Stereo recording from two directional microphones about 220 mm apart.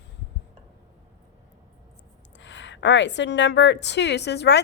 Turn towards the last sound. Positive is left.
turn(degrees=50)  # may be behind; listen again after turning